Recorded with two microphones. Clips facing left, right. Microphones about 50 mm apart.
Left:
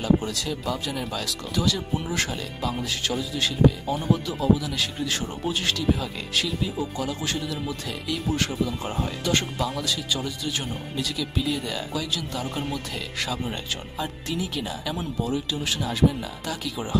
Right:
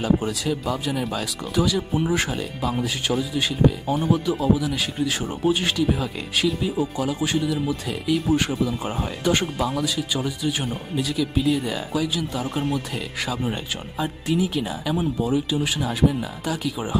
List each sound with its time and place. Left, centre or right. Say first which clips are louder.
0.0 s speech: right 2 dB; centre